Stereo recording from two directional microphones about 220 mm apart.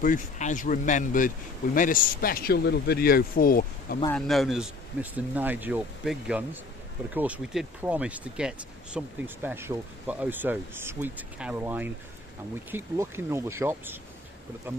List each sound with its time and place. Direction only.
0.0 s speech: 35° left (ahead or behind)
4.1 s speech: centre (ahead or behind)